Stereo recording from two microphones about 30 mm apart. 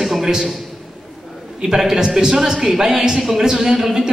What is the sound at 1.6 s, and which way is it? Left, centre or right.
A man's voice, centre.